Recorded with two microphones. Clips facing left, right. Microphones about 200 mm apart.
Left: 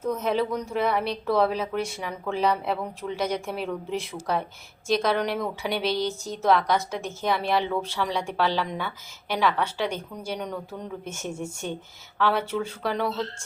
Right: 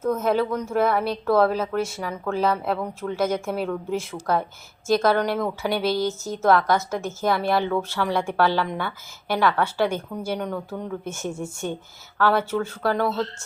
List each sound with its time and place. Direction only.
0.0 s speech: 50° right (ahead or behind)
12.1 s speech: 55° right (ahead or behind)